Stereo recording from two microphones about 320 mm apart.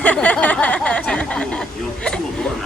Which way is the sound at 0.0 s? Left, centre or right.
Centre.